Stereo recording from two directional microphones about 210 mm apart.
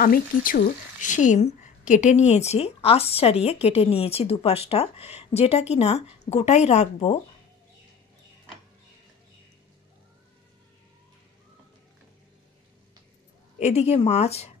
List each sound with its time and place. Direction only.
0.0 s a woman's voice: 40° left (ahead or behind)
13.6 s speech: 30° left (ahead or behind)